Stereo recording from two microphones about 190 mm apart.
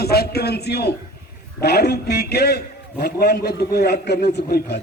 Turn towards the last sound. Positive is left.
turn(degrees=55)  # may be behind; listen again after turning